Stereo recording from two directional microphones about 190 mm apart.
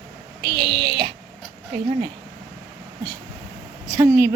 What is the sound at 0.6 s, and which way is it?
Speech, 55° right (ahead or behind).